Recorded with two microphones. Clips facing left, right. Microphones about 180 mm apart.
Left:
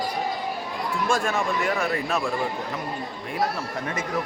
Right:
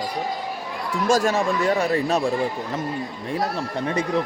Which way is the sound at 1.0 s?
40° right (ahead or behind).